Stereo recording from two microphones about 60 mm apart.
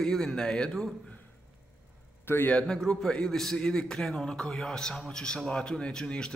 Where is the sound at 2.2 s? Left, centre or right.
Left.